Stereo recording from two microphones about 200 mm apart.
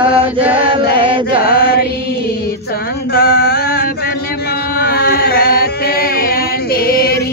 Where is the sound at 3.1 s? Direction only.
55° left (ahead or behind).